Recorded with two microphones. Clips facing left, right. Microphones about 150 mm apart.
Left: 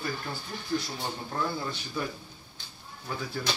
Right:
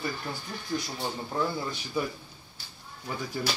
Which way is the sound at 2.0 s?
10° right (ahead or behind).